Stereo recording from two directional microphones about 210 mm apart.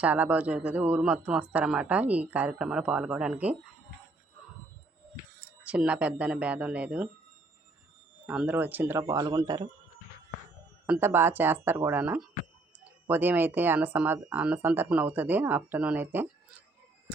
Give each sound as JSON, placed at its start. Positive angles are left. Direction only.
{"t": 0.0, "sound": "speech", "side_deg": -5}
{"t": 5.6, "sound": "speech", "side_deg": -5}
{"t": 8.3, "sound": "speech", "side_deg": -5}
{"t": 10.8, "sound": "speech", "side_deg": -10}